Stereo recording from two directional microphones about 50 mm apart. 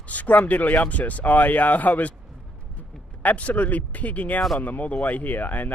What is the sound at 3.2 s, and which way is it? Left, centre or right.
Speech, left.